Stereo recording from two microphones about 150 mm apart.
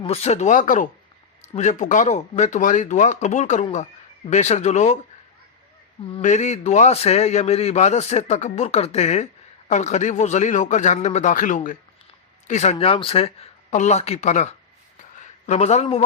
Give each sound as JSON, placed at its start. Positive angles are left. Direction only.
{"t": 0.0, "sound": "a man's voice", "side_deg": 45}
{"t": 6.2, "sound": "a man's voice", "side_deg": 50}
{"t": 12.5, "sound": "a man's voice", "side_deg": 50}